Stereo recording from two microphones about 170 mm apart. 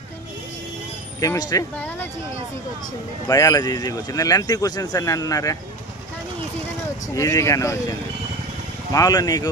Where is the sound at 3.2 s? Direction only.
20° left (ahead or behind).